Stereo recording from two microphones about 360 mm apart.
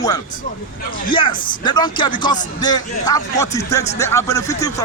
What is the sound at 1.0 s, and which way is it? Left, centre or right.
Speech, centre.